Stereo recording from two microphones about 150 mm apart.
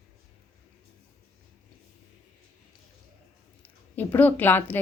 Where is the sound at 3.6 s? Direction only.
10° left (ahead or behind).